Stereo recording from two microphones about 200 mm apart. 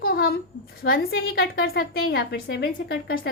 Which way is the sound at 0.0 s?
50° left (ahead or behind).